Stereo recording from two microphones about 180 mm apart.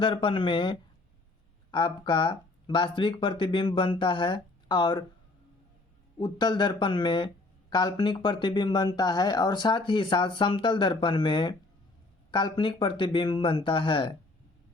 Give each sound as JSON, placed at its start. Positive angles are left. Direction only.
{"t": 0.0, "sound": "speech", "side_deg": 30}
{"t": 6.1, "sound": "speech", "side_deg": 25}